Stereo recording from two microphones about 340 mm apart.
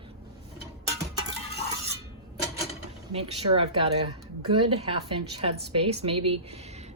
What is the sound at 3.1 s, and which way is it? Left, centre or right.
Speech, centre.